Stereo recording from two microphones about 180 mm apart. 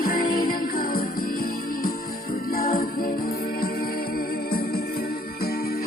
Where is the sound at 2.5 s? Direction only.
55° left (ahead or behind).